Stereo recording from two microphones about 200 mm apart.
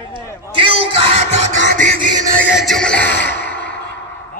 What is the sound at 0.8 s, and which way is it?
Music, 65° left (ahead or behind).